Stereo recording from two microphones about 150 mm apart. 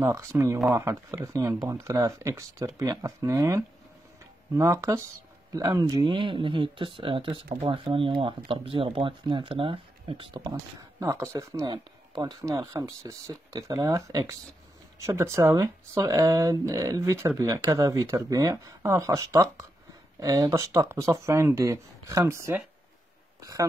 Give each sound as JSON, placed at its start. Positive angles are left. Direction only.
{"t": 0.0, "sound": "speech", "side_deg": -20}